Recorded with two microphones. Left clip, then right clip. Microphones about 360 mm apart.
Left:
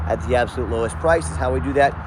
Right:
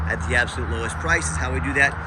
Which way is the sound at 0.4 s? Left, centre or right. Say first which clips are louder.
Left 5 dB; left.